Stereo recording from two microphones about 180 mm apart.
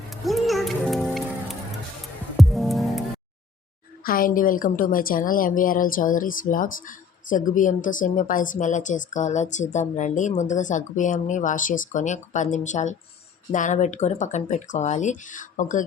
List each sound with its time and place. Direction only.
0.1 s music: centre (ahead or behind)
2.4 s music: centre (ahead or behind)
4.0 s a woman's voice: 55° left (ahead or behind)